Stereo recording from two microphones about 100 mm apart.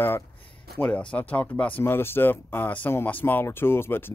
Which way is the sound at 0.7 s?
15° left (ahead or behind).